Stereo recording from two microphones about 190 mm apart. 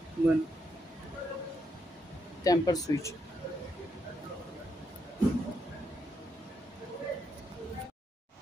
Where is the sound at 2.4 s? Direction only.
20° left (ahead or behind).